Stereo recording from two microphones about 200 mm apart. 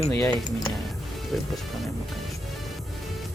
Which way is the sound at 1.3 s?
Centre (ahead or behind).